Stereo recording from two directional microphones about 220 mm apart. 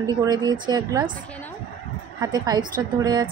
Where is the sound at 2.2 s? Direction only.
20° right (ahead or behind).